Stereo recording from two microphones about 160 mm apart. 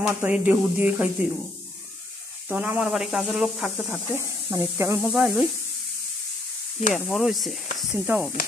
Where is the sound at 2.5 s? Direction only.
10° right (ahead or behind).